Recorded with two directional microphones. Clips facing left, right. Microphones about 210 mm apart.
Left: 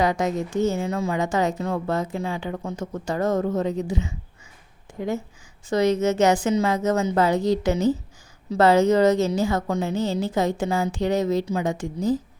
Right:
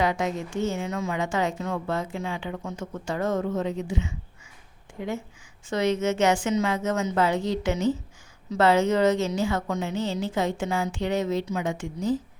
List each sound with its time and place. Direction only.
0.0 s a woman's voice: 40° left (ahead or behind)